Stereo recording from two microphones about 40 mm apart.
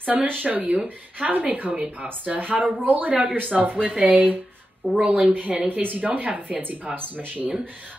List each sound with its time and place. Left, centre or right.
0.0 s speech: right
5.0 s speech: right
5.3 s speech: right
6.0 s speech: right
7.0 s speech: right